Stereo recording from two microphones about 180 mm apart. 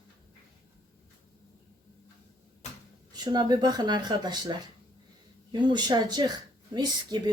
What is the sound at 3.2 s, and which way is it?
Speech, 20° right (ahead or behind).